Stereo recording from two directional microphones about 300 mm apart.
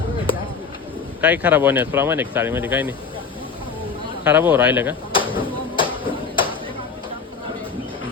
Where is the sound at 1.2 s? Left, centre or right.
Centre.